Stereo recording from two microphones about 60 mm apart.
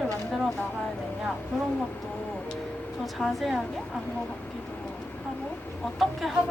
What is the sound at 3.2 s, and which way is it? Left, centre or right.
Speech, centre.